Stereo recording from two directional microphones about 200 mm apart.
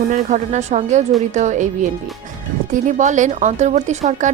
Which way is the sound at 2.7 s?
40° right (ahead or behind).